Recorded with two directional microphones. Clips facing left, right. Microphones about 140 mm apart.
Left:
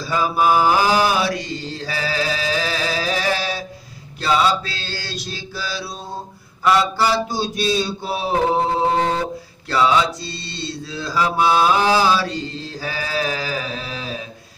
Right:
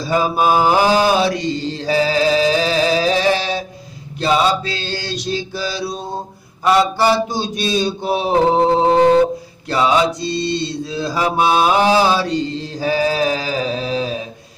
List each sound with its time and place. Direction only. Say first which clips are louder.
0.0 s mantra: right 3 dB; 20° right (ahead or behind)